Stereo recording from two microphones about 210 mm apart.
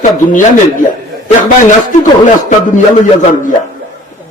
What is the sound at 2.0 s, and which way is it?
Speech, 35° left (ahead or behind).